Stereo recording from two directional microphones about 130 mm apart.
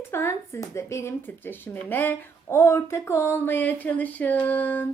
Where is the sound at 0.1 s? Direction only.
20° left (ahead or behind).